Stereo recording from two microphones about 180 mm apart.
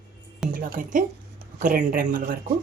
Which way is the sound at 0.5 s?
50° right (ahead or behind).